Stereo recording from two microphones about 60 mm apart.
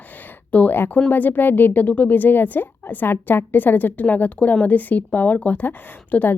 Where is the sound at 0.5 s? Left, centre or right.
Left.